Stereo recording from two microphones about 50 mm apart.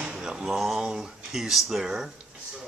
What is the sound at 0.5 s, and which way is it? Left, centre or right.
Speech, centre.